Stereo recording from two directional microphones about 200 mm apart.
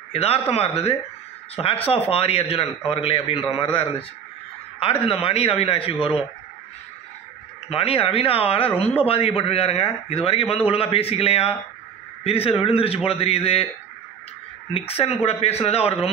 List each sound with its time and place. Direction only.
0.1 s speech: 30° left (ahead or behind)
5.0 s speech: 30° left (ahead or behind)
7.7 s speech: 30° left (ahead or behind)
14.7 s speech: 30° left (ahead or behind)